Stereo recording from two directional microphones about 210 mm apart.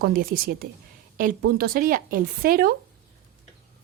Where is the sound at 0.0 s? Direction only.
45° right (ahead or behind).